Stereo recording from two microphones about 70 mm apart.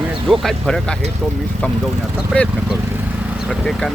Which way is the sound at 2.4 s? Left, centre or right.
Centre.